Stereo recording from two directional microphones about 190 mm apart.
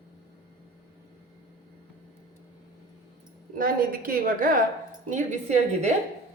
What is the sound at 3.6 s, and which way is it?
A woman's voice, 50° right (ahead or behind).